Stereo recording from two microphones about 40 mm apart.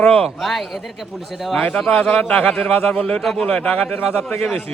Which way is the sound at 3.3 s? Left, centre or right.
Centre.